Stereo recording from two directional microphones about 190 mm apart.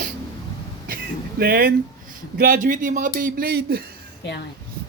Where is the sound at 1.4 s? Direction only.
55° right (ahead or behind).